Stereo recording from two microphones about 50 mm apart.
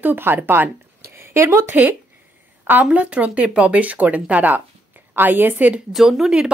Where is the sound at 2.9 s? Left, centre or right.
Right.